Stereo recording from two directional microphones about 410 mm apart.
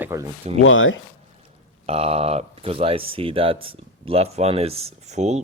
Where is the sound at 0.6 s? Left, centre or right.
Left.